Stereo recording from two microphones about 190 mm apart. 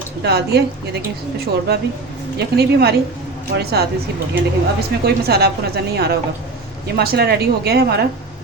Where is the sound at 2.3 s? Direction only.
60° right (ahead or behind).